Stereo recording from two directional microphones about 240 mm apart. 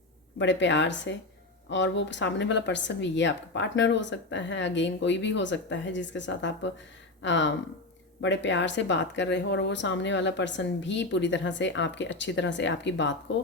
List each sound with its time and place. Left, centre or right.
0.3 s speech: left